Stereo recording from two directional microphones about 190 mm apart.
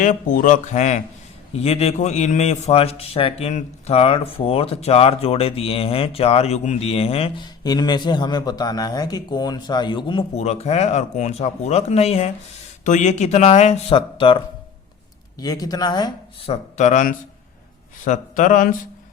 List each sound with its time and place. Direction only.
0.0 s a man's voice: 45° left (ahead or behind); by 16.6 s 20° left (ahead or behind)
16.7 s a man's voice: 40° left (ahead or behind)